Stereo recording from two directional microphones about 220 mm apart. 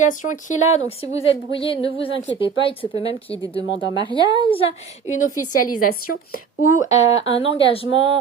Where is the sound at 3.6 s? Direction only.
20° right (ahead or behind).